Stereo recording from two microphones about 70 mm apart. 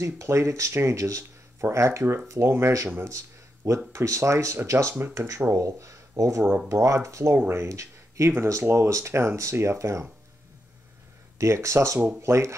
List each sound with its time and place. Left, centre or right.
0.0 s speech: right
3.1 s a sound: right
3.9 s speech: right
7.3 s speech: right
7.6 s speech: right
11.3 s speech: right